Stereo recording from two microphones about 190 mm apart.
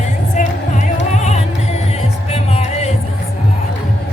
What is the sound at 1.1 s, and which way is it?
Music, 35° left (ahead or behind).